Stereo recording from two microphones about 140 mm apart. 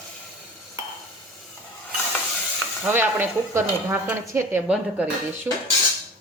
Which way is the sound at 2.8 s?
15° right (ahead or behind).